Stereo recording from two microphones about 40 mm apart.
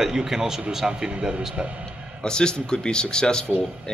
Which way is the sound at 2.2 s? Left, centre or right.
Left.